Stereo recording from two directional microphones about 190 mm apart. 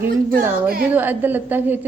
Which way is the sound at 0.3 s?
50° right (ahead or behind).